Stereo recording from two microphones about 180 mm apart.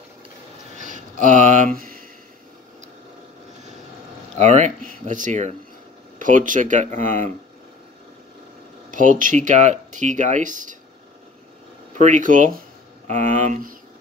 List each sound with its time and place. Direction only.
0.8 s a sound: 45° right (ahead or behind)
4.4 s speech: 40° right (ahead or behind)
8.9 s speech: 45° right (ahead or behind)
12.0 s speech: 45° right (ahead or behind)